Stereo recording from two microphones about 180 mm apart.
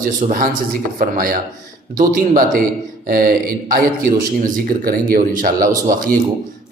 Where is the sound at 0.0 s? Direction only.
45° right (ahead or behind).